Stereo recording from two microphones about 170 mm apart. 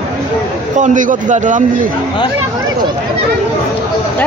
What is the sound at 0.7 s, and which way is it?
Speech, 50° right (ahead or behind).